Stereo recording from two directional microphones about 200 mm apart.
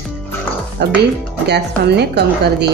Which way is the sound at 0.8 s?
55° right (ahead or behind).